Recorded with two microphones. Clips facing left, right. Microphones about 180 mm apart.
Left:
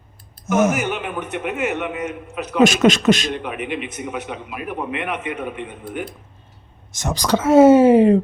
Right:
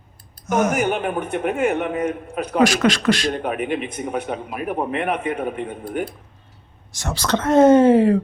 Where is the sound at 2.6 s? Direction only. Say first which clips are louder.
Left 3 dB; 20° left (ahead or behind).